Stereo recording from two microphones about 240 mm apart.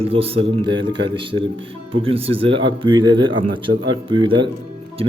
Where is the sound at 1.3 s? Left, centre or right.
Right.